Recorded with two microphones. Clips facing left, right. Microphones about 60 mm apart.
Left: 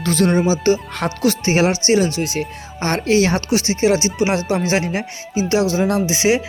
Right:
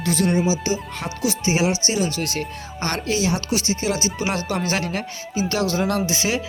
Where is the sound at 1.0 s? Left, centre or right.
Left.